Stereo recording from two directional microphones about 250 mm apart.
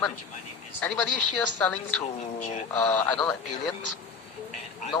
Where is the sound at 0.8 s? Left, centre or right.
Centre.